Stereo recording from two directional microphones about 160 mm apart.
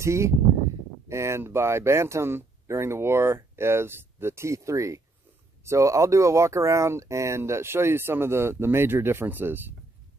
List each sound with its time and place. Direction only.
0.0 s speech: 15° right (ahead or behind)